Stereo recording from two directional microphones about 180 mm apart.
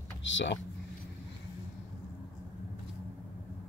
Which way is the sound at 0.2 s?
90° left.